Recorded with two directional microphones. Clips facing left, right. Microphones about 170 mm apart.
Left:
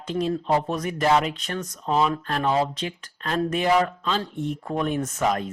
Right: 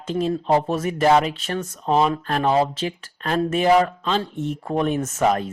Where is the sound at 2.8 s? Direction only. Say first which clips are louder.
Right 4 dB; 45° right (ahead or behind); by 5.1 s 25° right (ahead or behind).